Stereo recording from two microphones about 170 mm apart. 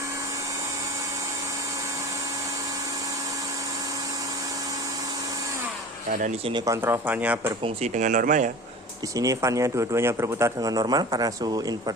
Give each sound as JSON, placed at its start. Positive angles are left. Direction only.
{"t": 6.1, "sound": "speech", "side_deg": -55}
{"t": 6.5, "sound": "speech", "side_deg": -15}
{"t": 7.6, "sound": "speech", "side_deg": -45}
{"t": 9.1, "sound": "speech", "side_deg": -20}